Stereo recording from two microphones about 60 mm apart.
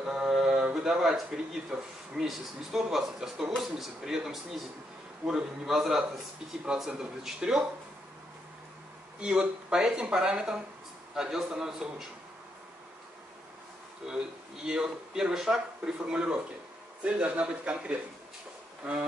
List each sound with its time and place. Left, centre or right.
0.0 s mantra: centre
0.7 s a man's voice: centre
9.2 s speech: centre
14.0 s a man's voice: centre